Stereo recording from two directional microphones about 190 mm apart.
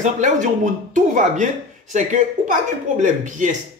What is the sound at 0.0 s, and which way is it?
Speech, 40° right (ahead or behind).